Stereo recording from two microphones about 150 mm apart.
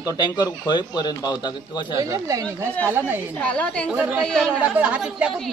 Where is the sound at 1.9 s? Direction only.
20° right (ahead or behind).